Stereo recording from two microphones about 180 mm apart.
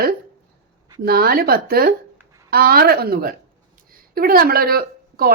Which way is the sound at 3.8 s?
55° right (ahead or behind).